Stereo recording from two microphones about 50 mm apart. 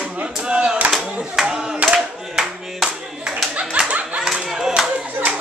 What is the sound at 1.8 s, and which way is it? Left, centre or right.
Clapping, centre.